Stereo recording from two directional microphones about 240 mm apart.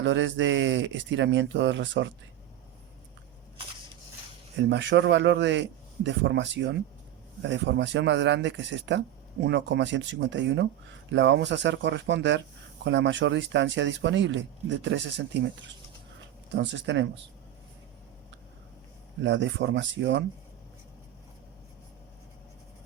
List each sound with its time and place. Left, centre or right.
0.0 s speech: right
4.7 s speech: right
16.6 s speech: right
19.2 s speech: right